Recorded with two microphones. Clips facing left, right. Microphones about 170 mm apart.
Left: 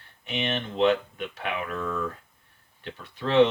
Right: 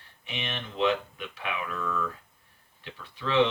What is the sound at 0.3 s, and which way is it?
Speech, 35° left (ahead or behind).